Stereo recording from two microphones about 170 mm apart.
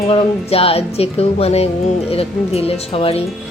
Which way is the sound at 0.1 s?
35° left (ahead or behind).